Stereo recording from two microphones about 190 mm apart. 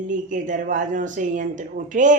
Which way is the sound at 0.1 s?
40° right (ahead or behind).